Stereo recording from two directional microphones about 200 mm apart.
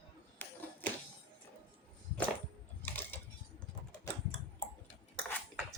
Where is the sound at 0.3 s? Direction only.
10° left (ahead or behind).